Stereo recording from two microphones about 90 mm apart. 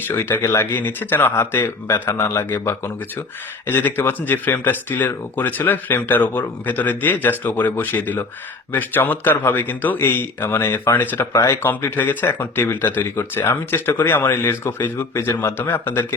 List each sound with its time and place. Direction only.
0.1 s speech: 25° left (ahead or behind)